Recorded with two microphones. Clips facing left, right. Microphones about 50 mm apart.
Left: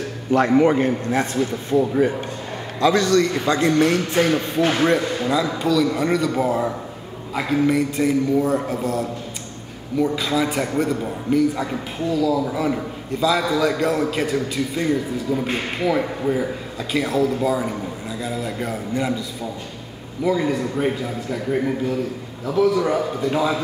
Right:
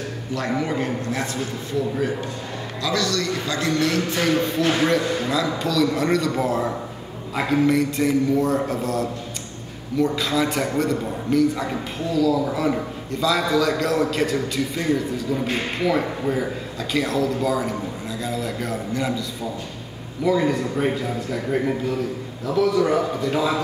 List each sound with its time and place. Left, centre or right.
0.3 s a man's voice: left
5.2 s a man's voice: centre
20.2 s a man's voice: centre